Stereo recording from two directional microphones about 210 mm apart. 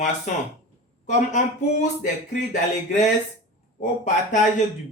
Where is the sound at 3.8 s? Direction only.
35° left (ahead or behind).